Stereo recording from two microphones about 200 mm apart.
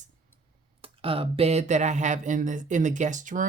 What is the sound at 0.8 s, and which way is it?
Speech, 30° right (ahead or behind).